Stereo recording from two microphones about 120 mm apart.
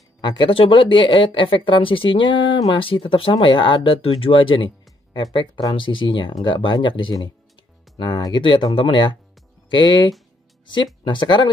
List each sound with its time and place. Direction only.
0.2 s speech: 40° left (ahead or behind)
8.4 s speech: 45° left (ahead or behind)
11.1 s speech: 40° left (ahead or behind)